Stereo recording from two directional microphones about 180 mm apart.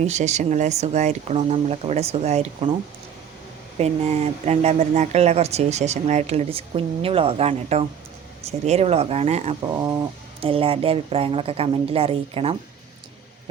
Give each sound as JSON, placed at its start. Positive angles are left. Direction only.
{"t": 0.0, "sound": "speech", "side_deg": -40}
{"t": 3.8, "sound": "speech", "side_deg": -35}